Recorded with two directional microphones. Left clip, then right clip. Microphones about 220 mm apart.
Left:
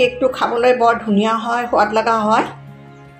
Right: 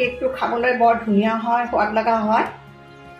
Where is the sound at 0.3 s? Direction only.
40° left (ahead or behind).